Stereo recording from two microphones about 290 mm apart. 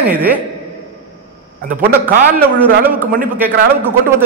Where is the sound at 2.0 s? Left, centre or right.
Centre.